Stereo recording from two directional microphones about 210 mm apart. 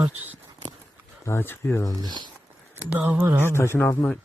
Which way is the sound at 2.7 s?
10° right (ahead or behind).